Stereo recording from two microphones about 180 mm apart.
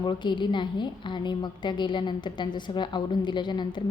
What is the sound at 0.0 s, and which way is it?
A woman's voice, 25° left (ahead or behind).